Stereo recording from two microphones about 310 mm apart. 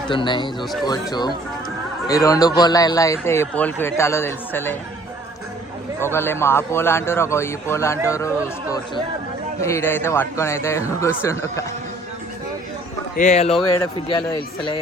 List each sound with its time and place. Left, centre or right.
0.1 s a man's voice: centre
0.6 s speech: centre
0.9 s a man's voice: centre
6.0 s a man's voice: centre
9.6 s a man's voice: centre
13.1 s speech: left
13.5 s speech: centre
14.1 s a man's voice: centre